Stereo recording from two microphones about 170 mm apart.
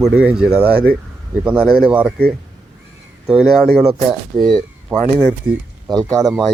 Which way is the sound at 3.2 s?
10° right (ahead or behind).